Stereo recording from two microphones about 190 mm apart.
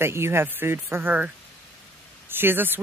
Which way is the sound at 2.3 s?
10° right (ahead or behind).